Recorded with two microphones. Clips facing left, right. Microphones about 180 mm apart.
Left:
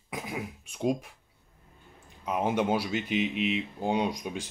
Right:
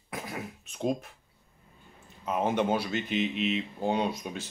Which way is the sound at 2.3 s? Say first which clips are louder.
Even; 10° left (ahead or behind).